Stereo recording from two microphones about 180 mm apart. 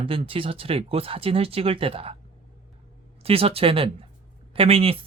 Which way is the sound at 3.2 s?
30° right (ahead or behind).